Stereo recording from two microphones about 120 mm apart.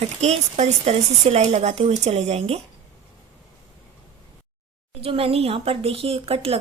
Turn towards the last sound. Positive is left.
turn(degrees=-55)  # may be behind; listen again after turning